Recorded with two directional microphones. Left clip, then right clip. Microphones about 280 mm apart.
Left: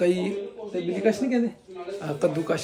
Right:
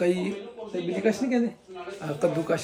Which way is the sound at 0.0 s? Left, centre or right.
Centre.